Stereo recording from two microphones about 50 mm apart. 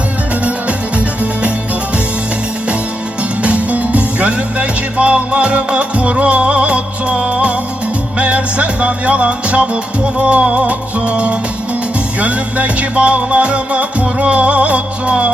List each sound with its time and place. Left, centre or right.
0.9 s music: right
3.4 s music: right